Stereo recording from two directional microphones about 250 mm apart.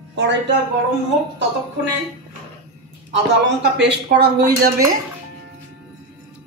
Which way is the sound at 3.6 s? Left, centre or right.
Right.